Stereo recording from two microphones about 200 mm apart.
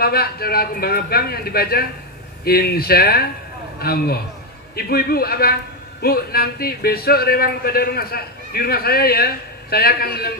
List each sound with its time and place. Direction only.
0.0 s a man's voice: 50° left (ahead or behind)